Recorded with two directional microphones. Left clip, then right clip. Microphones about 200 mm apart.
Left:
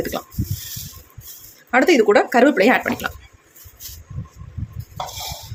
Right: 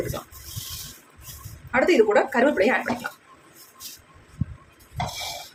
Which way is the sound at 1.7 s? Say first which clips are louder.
Left 5 dB; 45° left (ahead or behind).